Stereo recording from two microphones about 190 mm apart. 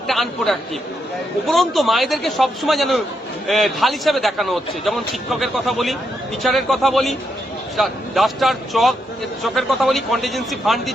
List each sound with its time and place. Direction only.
0.1 s a man's voice: centre (ahead or behind)